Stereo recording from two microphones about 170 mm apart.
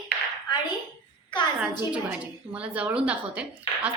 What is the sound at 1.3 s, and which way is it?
Speech, 25° left (ahead or behind).